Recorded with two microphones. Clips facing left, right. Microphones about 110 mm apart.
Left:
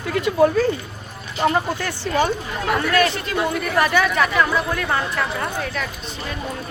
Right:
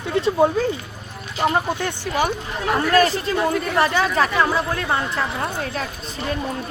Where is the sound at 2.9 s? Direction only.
35° right (ahead or behind).